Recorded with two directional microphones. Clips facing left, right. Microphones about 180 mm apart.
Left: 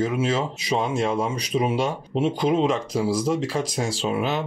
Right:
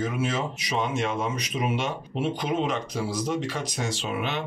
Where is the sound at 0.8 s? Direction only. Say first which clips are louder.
Left 3 dB; 35° left (ahead or behind).